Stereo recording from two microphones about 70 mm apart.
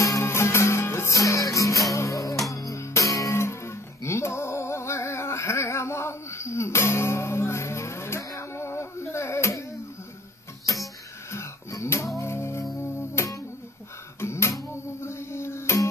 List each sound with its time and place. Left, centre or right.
0.0 s music: left
1.1 s music: left
11.3 s wheeze: left
12.2 s music: left